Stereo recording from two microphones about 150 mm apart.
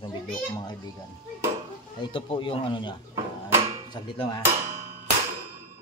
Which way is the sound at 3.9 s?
30° left (ahead or behind).